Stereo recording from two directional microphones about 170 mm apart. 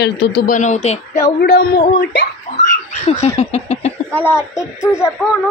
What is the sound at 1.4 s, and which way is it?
Speech, 65° left (ahead or behind).